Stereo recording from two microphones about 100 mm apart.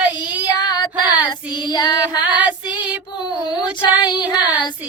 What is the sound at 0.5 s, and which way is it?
Child singing, 45° left (ahead or behind).